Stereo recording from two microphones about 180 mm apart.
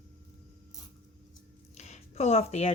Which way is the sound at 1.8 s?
40° left (ahead or behind).